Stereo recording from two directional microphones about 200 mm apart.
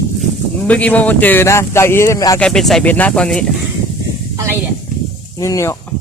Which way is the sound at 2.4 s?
5° left (ahead or behind).